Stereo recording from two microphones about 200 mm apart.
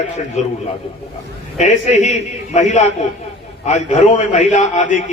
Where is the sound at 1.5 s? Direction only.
35° left (ahead or behind).